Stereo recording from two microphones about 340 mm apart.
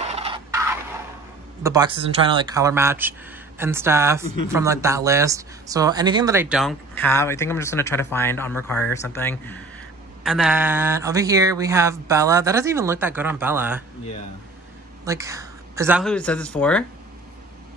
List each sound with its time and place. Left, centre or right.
0.0 s a sound: centre
1.6 s speech: centre
15.0 s speech: centre